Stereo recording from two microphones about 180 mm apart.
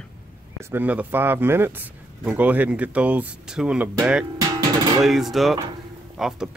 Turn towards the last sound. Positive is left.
turn(degrees=0)  # may be behind; listen again after turning